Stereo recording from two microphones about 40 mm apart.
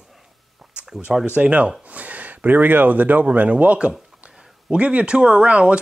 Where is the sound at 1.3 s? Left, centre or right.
Right.